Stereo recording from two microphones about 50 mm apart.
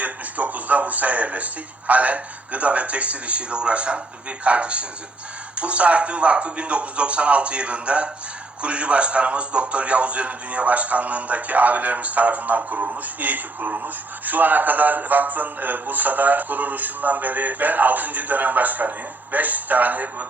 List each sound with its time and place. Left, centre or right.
0.0 s a man's voice: right